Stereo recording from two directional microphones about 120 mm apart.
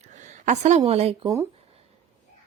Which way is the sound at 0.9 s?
60° right (ahead or behind).